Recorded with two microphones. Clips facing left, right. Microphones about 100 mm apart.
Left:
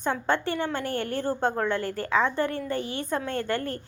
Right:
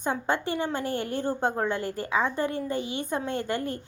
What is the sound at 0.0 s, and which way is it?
A woman's voice, 15° right (ahead or behind).